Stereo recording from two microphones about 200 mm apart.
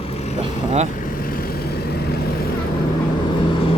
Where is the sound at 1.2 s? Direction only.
45° left (ahead or behind).